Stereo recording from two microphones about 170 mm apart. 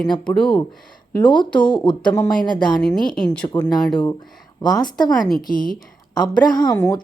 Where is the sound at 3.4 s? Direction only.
25° left (ahead or behind).